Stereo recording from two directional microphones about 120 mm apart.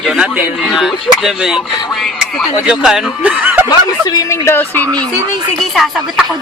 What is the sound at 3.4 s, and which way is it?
Snicker, 15° right (ahead or behind).